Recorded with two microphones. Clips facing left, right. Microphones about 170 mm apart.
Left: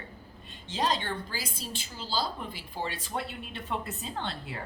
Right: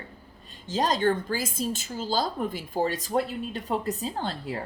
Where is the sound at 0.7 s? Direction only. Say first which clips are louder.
Right 6 dB; 45° right (ahead or behind).